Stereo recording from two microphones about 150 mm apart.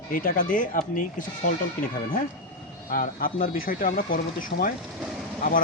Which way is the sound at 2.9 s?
75° left (ahead or behind).